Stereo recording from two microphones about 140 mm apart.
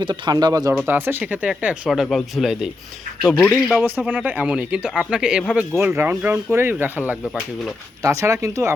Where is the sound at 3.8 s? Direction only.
10° right (ahead or behind).